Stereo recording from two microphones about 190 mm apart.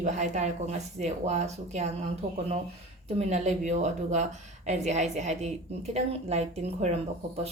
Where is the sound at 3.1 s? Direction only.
35° right (ahead or behind).